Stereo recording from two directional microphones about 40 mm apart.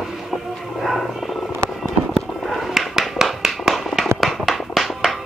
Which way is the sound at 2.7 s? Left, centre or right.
Centre.